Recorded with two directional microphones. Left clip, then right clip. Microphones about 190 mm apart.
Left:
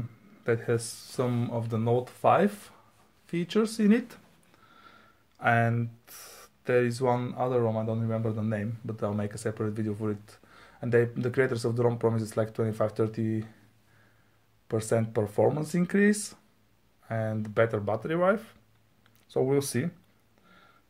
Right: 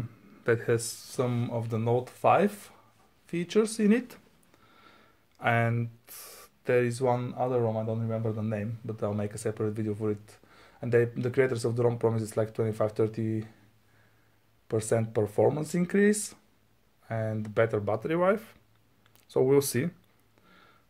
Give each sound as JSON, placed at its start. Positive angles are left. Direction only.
{"t": 0.4, "sound": "speech", "side_deg": -25}
{"t": 14.7, "sound": "speech", "side_deg": -15}
{"t": 20.4, "sound": "a sound", "side_deg": -25}